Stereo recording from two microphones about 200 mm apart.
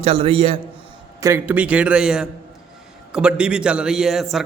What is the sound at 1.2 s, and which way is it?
A man's voice, 15° right (ahead or behind).